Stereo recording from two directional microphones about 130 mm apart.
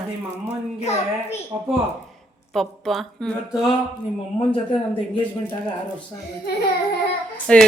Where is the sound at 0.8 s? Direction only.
55° left (ahead or behind).